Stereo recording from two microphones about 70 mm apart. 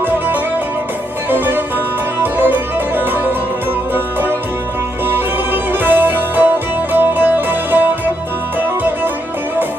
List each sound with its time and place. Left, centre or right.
1.3 s music: right